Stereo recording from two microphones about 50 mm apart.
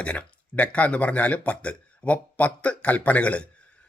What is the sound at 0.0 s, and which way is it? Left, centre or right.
Speech, left.